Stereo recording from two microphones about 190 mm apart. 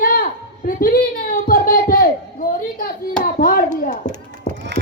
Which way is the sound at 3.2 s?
50° left (ahead or behind).